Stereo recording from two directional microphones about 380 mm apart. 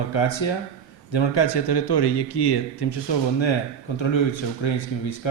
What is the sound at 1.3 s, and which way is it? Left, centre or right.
Speech, left.